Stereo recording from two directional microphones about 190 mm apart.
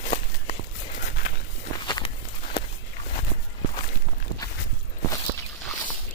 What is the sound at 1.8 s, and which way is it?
Walk, 20° left (ahead or behind).